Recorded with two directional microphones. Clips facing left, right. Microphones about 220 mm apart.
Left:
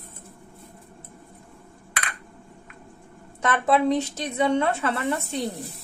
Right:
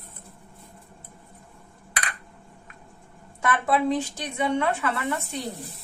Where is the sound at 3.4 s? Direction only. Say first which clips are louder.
Left 2 dB; 20° left (ahead or behind).